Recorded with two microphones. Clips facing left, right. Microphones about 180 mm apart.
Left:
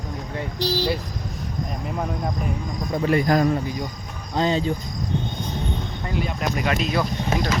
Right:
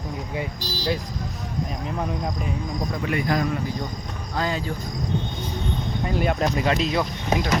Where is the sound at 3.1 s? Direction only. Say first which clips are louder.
Left 5 dB; 40° left (ahead or behind).